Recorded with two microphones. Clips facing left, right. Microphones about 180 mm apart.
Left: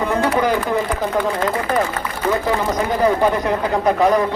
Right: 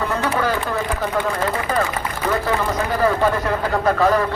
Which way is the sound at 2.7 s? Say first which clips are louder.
Left 2 dB; 15° left (ahead or behind).